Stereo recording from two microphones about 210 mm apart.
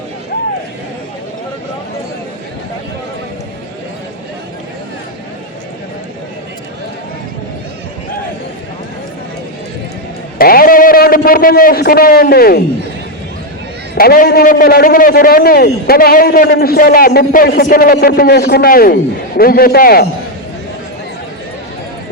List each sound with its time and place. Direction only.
10.3 s a man's voice: 45° left (ahead or behind)
13.9 s a man's voice: 45° left (ahead or behind)